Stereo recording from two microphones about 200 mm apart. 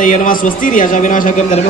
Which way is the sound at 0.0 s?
40° left (ahead or behind).